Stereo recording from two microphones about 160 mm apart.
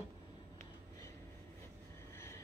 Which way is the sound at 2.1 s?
15° left (ahead or behind).